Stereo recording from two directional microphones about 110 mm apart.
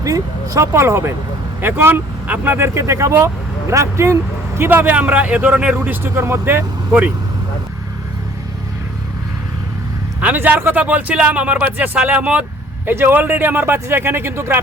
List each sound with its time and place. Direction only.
0.0 s speech: 30° right (ahead or behind)
10.2 s speech: 15° right (ahead or behind)